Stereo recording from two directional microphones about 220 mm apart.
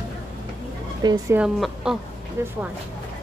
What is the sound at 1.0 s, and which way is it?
Speech, 20° right (ahead or behind).